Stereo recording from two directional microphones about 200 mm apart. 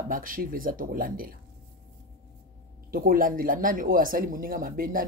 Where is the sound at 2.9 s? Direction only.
45° right (ahead or behind).